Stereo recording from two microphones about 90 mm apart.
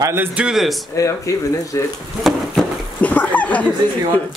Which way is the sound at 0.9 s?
35° left (ahead or behind).